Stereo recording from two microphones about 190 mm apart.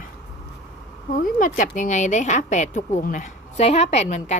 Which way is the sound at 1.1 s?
45° left (ahead or behind).